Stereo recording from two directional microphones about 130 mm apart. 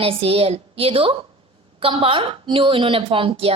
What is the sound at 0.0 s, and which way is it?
A woman's voice, 50° right (ahead or behind).